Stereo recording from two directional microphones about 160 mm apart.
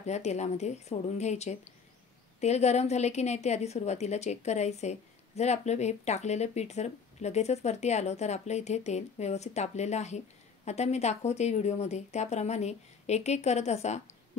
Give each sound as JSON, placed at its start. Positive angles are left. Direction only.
{"t": 0.0, "sound": "a woman's voice", "side_deg": 45}